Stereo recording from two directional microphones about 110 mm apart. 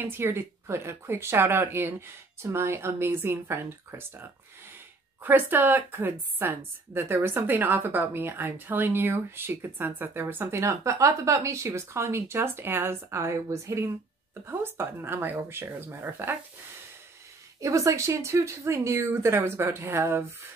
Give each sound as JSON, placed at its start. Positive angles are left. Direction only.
{"t": 0.0, "sound": "a woman's voice", "side_deg": -20}
{"t": 17.6, "sound": "a woman's voice", "side_deg": -30}